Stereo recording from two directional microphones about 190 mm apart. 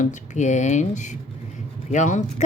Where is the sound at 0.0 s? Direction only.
40° left (ahead or behind).